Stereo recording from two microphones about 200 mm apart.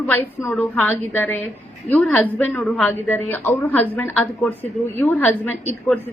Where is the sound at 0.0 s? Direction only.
10° left (ahead or behind).